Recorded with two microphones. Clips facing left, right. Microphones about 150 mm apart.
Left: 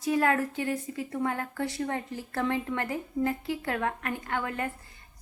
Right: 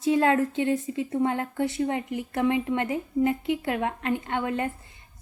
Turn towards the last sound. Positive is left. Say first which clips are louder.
# right 4 dB
turn(degrees=-25)  # may be behind; listen again after turning